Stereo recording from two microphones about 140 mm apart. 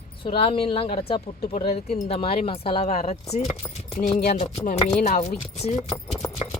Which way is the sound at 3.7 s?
45° left (ahead or behind).